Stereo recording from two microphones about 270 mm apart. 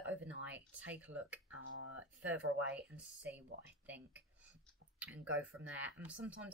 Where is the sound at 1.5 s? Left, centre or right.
Right.